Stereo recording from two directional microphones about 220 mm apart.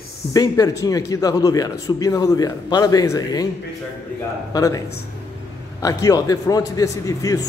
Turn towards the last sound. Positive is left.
turn(degrees=15)  # may be behind; listen again after turning